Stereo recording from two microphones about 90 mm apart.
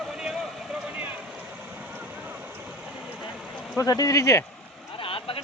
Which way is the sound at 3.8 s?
40° left (ahead or behind).